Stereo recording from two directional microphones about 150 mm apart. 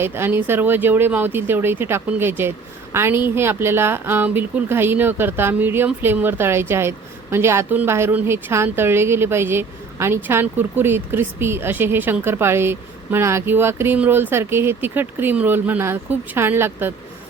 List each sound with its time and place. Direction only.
0.0 s speech: 15° right (ahead or behind)